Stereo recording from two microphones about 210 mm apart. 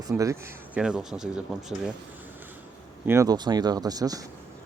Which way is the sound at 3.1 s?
15° right (ahead or behind).